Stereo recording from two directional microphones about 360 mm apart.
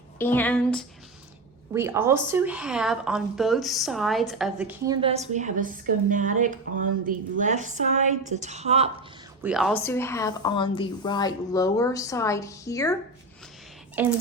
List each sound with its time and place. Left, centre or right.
0.2 s a woman's voice: centre
9.4 s a woman's voice: centre
14.0 s a woman's voice: centre